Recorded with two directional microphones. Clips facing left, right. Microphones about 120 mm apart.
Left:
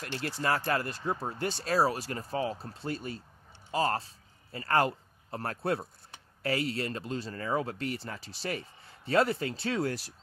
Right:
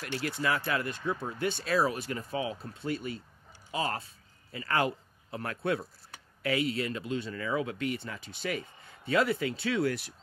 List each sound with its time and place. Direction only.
0.0 s speech: 35° left (ahead or behind)